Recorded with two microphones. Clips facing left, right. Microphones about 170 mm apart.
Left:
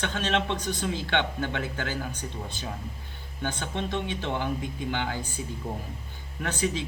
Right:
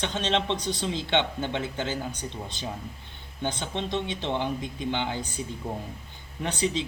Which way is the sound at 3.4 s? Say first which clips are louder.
Right 1 dB; 20° right (ahead or behind).